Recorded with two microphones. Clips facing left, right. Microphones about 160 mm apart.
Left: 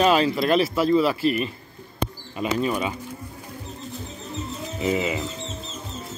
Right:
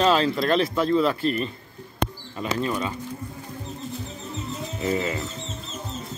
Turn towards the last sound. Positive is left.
turn(degrees=15)  # may be behind; listen again after turning